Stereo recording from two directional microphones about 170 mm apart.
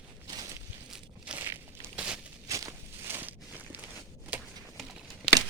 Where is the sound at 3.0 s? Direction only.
10° right (ahead or behind).